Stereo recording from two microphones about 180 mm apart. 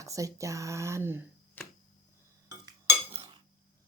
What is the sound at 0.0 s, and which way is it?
Speech, 15° right (ahead or behind).